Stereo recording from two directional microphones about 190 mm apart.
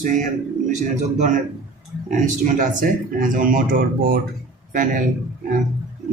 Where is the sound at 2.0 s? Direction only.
40° right (ahead or behind).